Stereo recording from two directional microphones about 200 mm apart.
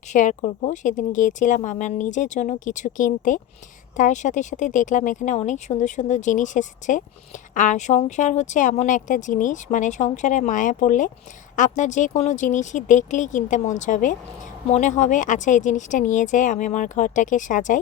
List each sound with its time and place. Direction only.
0.1 s speech: 40° left (ahead or behind)